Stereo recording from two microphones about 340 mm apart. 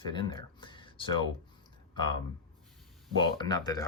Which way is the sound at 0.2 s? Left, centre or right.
Centre.